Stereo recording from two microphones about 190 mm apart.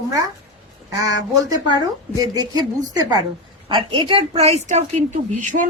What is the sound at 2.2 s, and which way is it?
A woman's voice, 20° right (ahead or behind).